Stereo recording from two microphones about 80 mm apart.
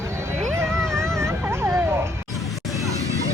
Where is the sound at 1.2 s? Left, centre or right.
Right.